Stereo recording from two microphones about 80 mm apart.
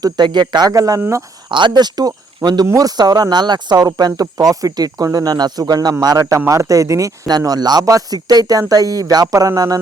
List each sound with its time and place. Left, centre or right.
0.0 s speech: right
0.7 s speech: right
1.5 s speech: right